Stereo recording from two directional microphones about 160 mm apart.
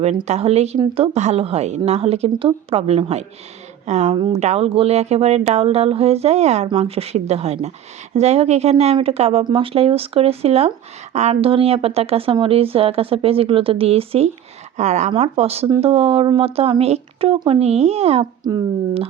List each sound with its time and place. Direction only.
0.3 s a woman's voice: 40° right (ahead or behind)